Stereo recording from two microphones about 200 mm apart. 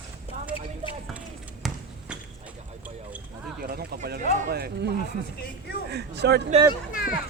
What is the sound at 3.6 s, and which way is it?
A man's voice, 50° right (ahead or behind).